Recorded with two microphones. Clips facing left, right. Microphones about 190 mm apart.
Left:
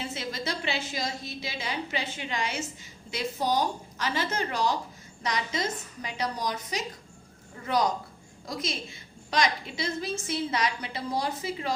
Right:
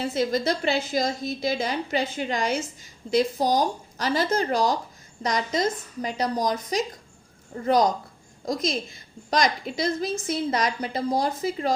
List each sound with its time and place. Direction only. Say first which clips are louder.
0.0 s a woman's voice: right 10 dB; 40° right (ahead or behind)
9.3 s a woman's voice: right 4 dB; 40° right (ahead or behind)